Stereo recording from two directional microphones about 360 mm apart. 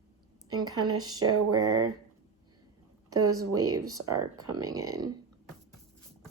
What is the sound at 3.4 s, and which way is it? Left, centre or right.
Speech, right.